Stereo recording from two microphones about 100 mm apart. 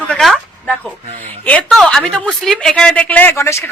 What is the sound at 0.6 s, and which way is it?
A woman's voice, 10° left (ahead or behind).